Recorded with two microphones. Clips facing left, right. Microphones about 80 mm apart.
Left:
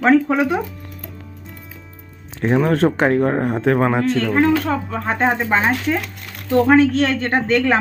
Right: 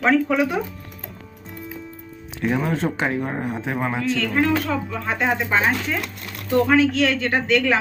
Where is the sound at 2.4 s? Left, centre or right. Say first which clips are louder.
Left 6 dB; left.